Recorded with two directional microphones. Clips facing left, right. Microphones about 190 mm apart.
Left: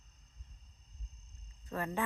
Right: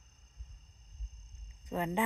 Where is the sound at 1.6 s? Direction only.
20° right (ahead or behind).